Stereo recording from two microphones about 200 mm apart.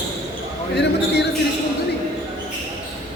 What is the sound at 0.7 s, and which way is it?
Speech, 55° left (ahead or behind).